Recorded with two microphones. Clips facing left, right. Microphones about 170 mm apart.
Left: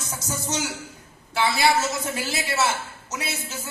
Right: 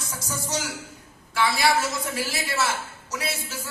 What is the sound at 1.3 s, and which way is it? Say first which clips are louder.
Speech: left 1 dB; 25° left (ahead or behind).